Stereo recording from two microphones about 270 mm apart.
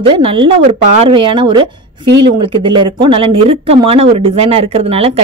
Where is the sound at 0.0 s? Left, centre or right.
Centre.